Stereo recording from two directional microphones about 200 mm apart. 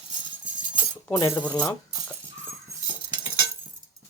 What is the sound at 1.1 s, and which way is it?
Speech, 10° left (ahead or behind).